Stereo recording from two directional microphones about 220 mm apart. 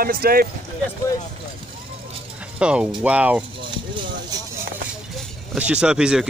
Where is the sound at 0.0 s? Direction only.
40° right (ahead or behind).